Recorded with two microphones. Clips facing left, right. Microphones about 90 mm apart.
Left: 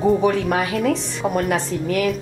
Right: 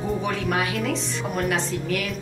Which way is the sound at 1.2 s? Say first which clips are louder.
Left 10 dB; 40° left (ahead or behind).